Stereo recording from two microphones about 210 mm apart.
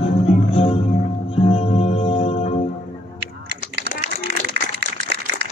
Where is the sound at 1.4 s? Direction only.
30° left (ahead or behind).